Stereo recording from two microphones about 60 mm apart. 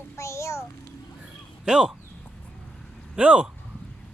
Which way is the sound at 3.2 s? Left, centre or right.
Right.